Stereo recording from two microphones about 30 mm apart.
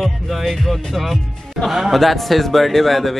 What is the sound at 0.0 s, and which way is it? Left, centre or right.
A man's voice, centre.